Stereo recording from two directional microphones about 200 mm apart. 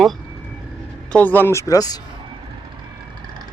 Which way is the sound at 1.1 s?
10° left (ahead or behind).